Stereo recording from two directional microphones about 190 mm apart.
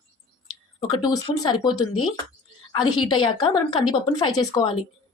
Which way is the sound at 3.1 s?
25° left (ahead or behind).